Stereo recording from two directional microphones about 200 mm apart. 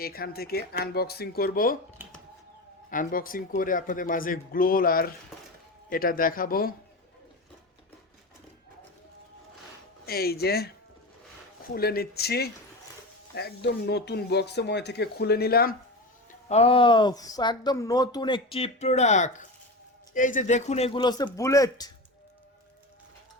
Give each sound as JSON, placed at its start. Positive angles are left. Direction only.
{"t": 0.0, "sound": "speech", "side_deg": 50}
{"t": 2.9, "sound": "speech", "side_deg": 45}
{"t": 10.1, "sound": "speech", "side_deg": 50}
{"t": 11.7, "sound": "speech", "side_deg": 50}
{"t": 16.5, "sound": "speech", "side_deg": 30}